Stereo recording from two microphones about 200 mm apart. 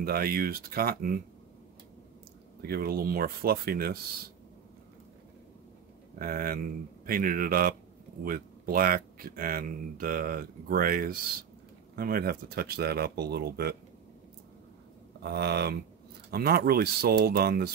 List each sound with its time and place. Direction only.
0.0 s speech: 50° right (ahead or behind)
2.6 s speech: 50° right (ahead or behind)
6.1 s speech: 45° right (ahead or behind)
15.2 s speech: 55° right (ahead or behind)